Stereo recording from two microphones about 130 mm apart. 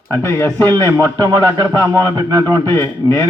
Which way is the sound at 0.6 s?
25° right (ahead or behind).